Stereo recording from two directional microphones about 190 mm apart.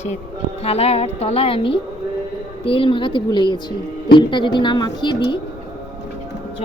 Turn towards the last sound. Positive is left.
turn(degrees=25)  # may be behind; listen again after turning